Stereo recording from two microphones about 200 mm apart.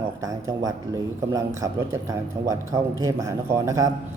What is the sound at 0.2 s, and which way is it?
Speech, 15° right (ahead or behind).